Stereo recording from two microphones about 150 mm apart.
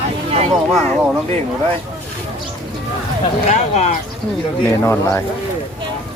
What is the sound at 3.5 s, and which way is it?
Speech, 50° left (ahead or behind).